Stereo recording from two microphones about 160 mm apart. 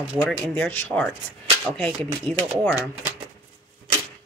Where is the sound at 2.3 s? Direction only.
35° right (ahead or behind).